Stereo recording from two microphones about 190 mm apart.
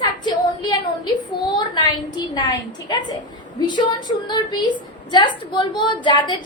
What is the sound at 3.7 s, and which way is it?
A woman's voice, 20° left (ahead or behind).